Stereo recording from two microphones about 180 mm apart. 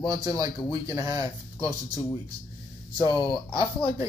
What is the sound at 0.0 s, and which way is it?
Speech, 20° right (ahead or behind).